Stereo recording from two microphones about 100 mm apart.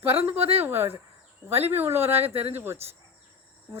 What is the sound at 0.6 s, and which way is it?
Speech, 20° right (ahead or behind).